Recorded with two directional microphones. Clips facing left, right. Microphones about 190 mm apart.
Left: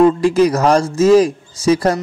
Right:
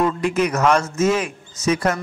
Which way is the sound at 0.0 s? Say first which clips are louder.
Left 8 dB; 30° left (ahead or behind).